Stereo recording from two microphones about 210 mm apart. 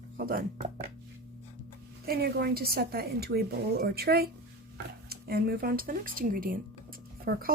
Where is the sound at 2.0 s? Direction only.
50° right (ahead or behind).